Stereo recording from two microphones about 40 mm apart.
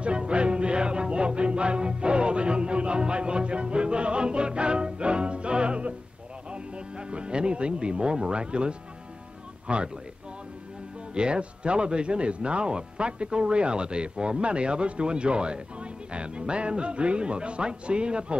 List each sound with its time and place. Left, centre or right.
0.0 s music: right
6.5 s speech: right
11.1 s speech: right